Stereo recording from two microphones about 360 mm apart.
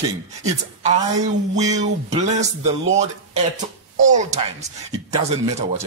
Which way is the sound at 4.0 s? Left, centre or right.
Centre.